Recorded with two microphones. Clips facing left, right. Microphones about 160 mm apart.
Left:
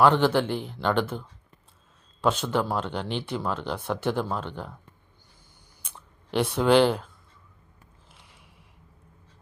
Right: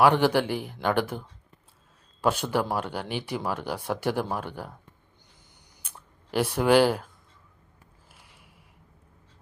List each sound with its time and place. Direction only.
0.0 s speech: 10° right (ahead or behind)
5.8 s speech: 5° right (ahead or behind)
8.3 s a sound: 60° right (ahead or behind)